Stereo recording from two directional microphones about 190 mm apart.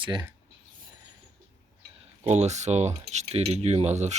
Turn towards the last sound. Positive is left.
turn(degrees=-35)  # may be behind; listen again after turning